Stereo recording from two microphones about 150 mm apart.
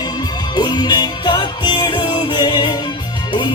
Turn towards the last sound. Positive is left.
turn(degrees=30)  # may be behind; listen again after turning